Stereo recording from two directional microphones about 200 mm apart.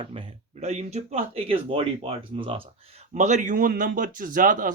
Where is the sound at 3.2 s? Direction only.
35° right (ahead or behind).